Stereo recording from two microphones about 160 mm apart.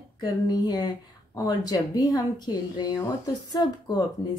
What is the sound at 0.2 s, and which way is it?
Speech, 25° left (ahead or behind).